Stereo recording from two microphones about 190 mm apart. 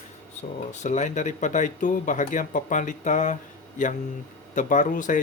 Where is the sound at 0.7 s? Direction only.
40° left (ahead or behind).